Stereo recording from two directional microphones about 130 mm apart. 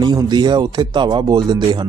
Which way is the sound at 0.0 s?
35° right (ahead or behind).